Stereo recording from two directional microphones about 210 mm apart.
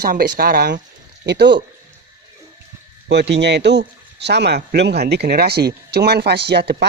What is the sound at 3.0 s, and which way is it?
Speech, 55° right (ahead or behind).